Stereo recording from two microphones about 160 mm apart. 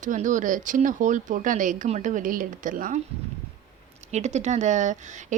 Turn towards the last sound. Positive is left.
turn(degrees=-50)  # may be behind; listen again after turning